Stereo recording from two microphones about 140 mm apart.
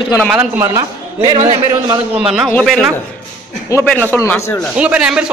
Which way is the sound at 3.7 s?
25° left (ahead or behind).